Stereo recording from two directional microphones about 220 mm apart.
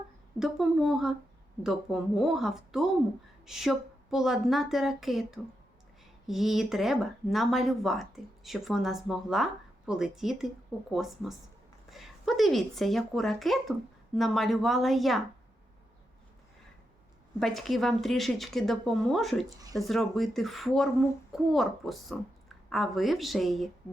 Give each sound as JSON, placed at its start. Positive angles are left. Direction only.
{"t": 0.3, "sound": "speech", "side_deg": 0}
{"t": 17.4, "sound": "speech", "side_deg": 0}
{"t": 19.5, "sound": "speech", "side_deg": -15}
{"t": 19.8, "sound": "speech", "side_deg": 0}